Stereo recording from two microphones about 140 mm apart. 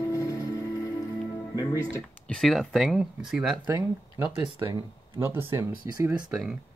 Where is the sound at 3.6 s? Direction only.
15° right (ahead or behind).